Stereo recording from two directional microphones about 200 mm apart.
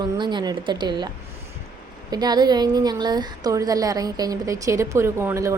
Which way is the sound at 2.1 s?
20° right (ahead or behind).